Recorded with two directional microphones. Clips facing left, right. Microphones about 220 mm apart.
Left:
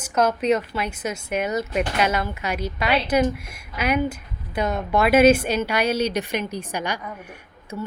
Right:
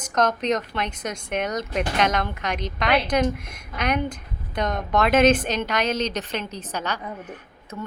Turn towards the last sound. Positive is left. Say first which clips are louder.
# left 3 dB
turn(degrees=15)  # may be behind; listen again after turning